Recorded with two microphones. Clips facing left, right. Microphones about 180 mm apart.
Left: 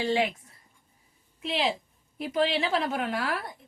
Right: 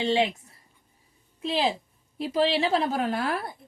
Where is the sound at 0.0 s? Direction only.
25° right (ahead or behind).